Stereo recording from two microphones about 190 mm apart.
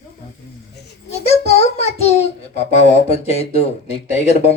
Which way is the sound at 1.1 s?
35° left (ahead or behind).